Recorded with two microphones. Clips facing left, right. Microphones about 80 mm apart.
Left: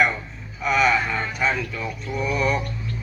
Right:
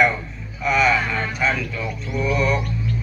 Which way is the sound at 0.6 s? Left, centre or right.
Centre.